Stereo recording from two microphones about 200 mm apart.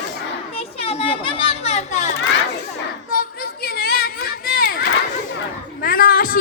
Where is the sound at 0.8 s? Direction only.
30° left (ahead or behind).